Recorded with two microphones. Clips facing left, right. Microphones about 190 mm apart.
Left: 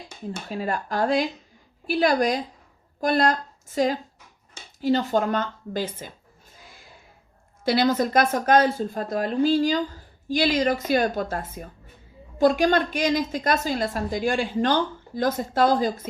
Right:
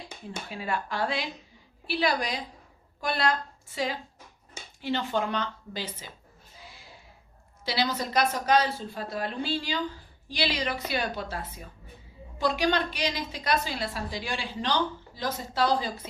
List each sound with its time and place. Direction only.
0.4 s a woman's voice: 40° left (ahead or behind)
6.5 s a sound: 45° left (ahead or behind)
7.6 s a woman's voice: 50° left (ahead or behind)